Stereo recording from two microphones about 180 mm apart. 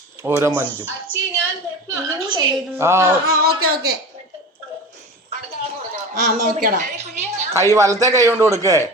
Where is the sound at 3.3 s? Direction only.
60° right (ahead or behind).